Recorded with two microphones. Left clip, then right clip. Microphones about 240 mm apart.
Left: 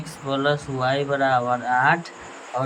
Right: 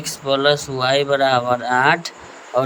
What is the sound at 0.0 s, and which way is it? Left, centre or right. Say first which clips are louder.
A man's voice: right 6 dB; right.